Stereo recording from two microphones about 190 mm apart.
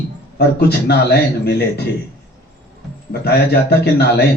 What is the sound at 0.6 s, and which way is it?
Speech, 60° left (ahead or behind).